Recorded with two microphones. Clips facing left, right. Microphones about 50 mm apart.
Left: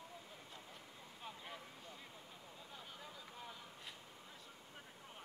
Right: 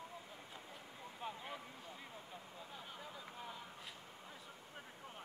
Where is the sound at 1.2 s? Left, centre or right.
Centre.